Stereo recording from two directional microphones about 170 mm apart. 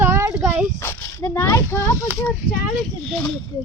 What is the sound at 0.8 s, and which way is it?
Speech, 15° left (ahead or behind).